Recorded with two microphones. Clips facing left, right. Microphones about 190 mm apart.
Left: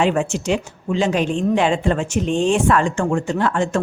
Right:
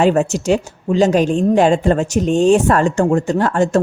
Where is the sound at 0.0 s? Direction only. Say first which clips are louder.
Right 4 dB; 40° right (ahead or behind).